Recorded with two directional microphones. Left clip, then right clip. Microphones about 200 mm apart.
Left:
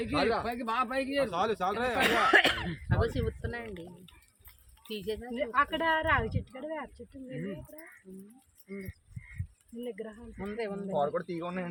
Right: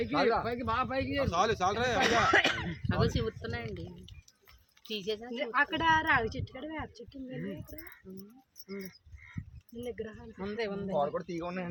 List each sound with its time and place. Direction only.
0.1 s speech: 10° left (ahead or behind)
0.4 s speech: 60° left (ahead or behind)
1.3 s speech: 25° right (ahead or behind)
2.0 s speech: 40° left (ahead or behind)
2.9 s speech: 10° right (ahead or behind)
5.3 s speech: 40° right (ahead or behind)
8.1 s speech: 10° right (ahead or behind)
9.8 s speech: 40° right (ahead or behind)
10.4 s speech: 10° right (ahead or behind)
11.1 s speech: 20° left (ahead or behind)